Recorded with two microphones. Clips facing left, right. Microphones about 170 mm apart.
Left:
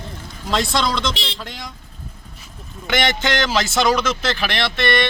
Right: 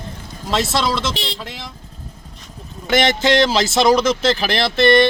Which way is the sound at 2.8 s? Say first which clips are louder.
Right 4 dB; 35° right (ahead or behind).